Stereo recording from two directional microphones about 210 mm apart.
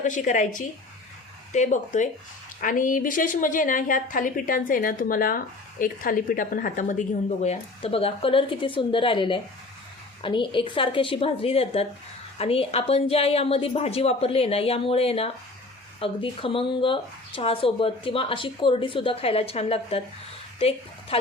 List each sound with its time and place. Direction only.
0.0 s a woman's voice: 35° left (ahead or behind)
1.5 s a woman's voice: 35° left (ahead or behind)